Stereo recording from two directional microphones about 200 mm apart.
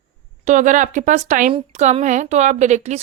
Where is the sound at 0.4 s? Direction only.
40° right (ahead or behind).